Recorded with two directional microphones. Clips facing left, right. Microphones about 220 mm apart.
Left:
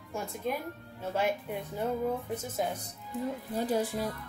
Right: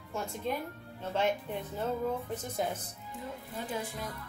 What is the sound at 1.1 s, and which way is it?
Speech, 10° left (ahead or behind).